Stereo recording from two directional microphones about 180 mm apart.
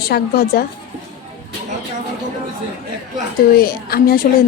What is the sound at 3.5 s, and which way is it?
Speech, 55° left (ahead or behind).